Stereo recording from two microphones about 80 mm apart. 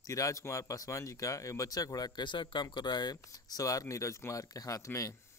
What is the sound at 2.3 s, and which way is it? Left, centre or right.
Speech, left.